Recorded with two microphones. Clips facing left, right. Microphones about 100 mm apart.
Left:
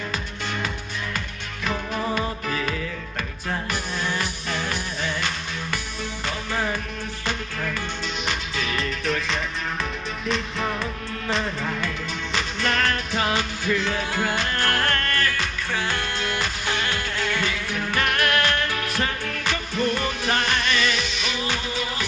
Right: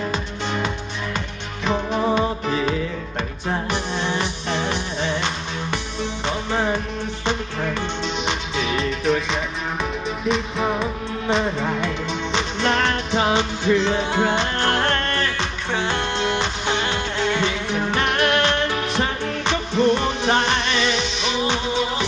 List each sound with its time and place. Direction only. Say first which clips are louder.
0.1 s music: right 5 dB; 25° right (ahead or behind)
8.5 s music: right 6 dB; centre (ahead or behind)
11.4 s music: right 5 dB; 30° right (ahead or behind)